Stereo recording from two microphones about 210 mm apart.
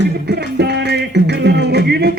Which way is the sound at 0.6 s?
55° right (ahead or behind).